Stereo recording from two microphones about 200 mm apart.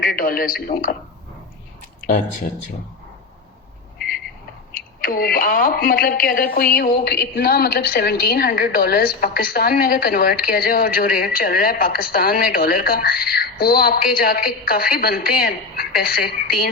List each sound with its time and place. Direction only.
0.0 s a woman's voice: 45° left (ahead or behind)
4.7 s a woman's voice: 45° left (ahead or behind)